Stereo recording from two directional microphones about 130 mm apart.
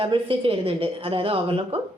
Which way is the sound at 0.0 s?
45° right (ahead or behind).